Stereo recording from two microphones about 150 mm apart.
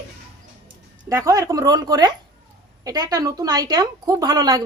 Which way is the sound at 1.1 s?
20° right (ahead or behind).